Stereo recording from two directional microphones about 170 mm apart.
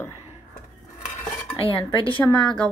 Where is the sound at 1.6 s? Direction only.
30° left (ahead or behind).